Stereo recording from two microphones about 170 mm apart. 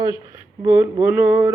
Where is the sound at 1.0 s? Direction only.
10° right (ahead or behind).